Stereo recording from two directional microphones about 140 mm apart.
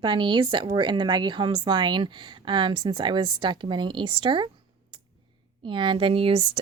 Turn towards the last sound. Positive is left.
turn(degrees=-40)  # may be behind; listen again after turning